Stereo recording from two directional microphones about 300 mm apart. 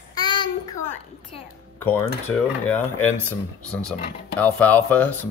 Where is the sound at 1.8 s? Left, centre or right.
Centre.